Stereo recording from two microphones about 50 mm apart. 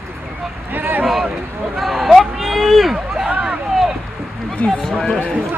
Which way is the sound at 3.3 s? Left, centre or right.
Right.